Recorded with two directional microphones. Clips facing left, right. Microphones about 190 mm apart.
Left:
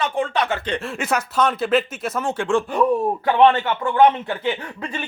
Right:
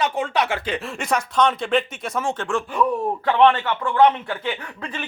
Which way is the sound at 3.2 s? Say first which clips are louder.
Left 1 dB; 20° left (ahead or behind).